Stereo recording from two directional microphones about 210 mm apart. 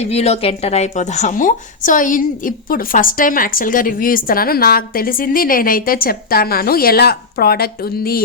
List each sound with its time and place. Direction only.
0.0 s a woman's voice: 30° left (ahead or behind); by 8.2 s 45° left (ahead or behind)